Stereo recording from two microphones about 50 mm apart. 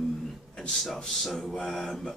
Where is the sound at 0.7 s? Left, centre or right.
Centre.